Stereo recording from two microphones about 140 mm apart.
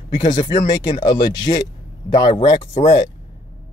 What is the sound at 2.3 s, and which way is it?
Speech, 45° left (ahead or behind).